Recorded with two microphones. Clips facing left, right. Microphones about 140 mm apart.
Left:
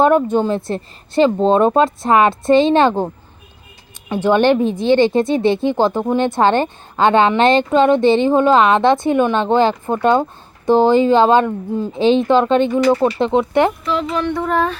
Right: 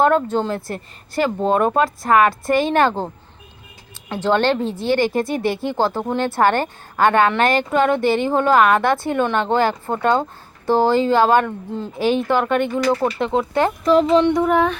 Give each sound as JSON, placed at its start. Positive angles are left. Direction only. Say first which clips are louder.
{"t": 0.0, "sound": "speech", "louder": "left 3 dB", "side_deg": 15}
{"t": 4.1, "sound": "speech", "louder": "left 4 dB", "side_deg": 15}
{"t": 13.8, "sound": "speech", "louder": "right 6 dB", "side_deg": -40}
{"t": 14.1, "sound": "child singing", "louder": "right 4 dB", "side_deg": -20}